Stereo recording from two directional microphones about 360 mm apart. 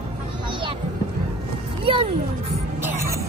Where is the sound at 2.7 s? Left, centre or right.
Centre.